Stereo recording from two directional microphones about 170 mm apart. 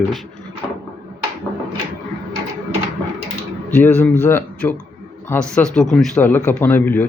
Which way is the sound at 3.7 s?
10° left (ahead or behind).